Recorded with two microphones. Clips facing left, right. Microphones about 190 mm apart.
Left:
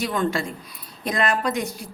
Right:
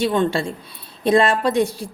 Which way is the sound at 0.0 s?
30° right (ahead or behind).